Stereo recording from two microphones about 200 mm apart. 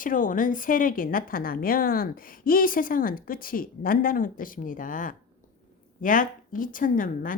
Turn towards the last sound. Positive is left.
turn(degrees=45)  # may be behind; listen again after turning